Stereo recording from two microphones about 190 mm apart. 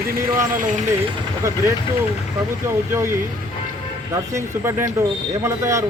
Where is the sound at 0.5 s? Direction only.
40° right (ahead or behind).